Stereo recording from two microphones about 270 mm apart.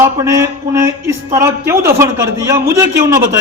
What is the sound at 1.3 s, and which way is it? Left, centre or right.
Speech, centre.